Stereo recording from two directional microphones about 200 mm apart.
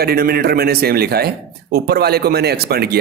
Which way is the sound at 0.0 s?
50° right (ahead or behind).